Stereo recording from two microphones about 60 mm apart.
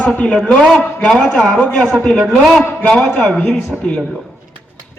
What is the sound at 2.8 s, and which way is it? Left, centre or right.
Speech, centre.